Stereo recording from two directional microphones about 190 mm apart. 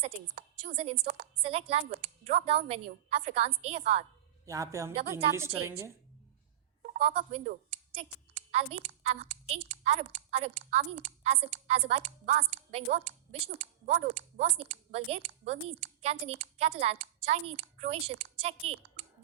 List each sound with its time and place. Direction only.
0.6 s a woman's voice: 40° right (ahead or behind)
4.4 s a woman's voice: 15° right (ahead or behind)
6.9 s a woman's voice: 35° right (ahead or behind)